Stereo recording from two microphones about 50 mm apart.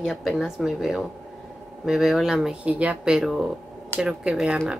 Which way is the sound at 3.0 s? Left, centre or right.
Centre.